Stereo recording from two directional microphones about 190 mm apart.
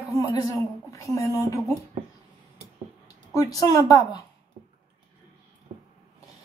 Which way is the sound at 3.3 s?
20° left (ahead or behind).